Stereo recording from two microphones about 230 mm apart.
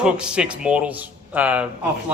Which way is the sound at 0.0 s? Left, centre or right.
Centre.